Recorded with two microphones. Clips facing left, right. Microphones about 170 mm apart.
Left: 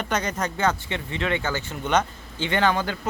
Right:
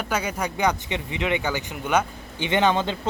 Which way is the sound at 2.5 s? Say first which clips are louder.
Right 2 dB; 20° right (ahead or behind).